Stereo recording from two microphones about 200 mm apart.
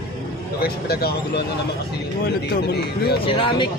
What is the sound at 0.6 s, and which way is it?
Speech, 50° left (ahead or behind).